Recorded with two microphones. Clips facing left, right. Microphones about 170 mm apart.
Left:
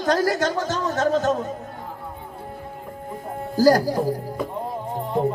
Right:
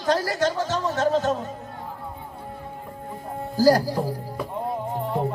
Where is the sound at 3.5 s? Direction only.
45° left (ahead or behind).